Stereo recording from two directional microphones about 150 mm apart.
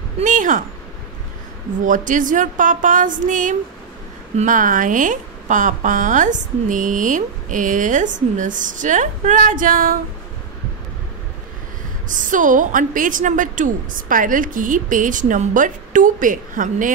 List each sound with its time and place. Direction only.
0.2 s a woman's voice: 60° right (ahead or behind)
1.9 s a woman's voice: 60° right (ahead or behind)
12.1 s a woman's voice: 60° right (ahead or behind)